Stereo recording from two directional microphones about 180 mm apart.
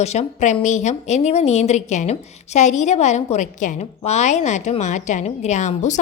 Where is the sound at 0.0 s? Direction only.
40° left (ahead or behind).